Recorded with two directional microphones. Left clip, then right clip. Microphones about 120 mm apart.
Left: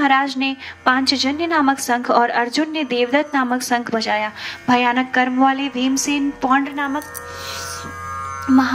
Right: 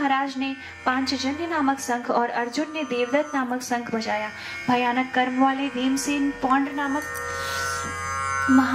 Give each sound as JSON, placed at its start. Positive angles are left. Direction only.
{"t": 0.0, "sound": "a woman's voice", "side_deg": 45}